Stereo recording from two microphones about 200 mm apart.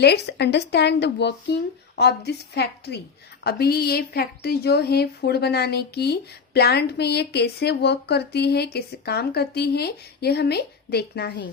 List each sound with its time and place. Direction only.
0.0 s a woman's voice: 55° left (ahead or behind)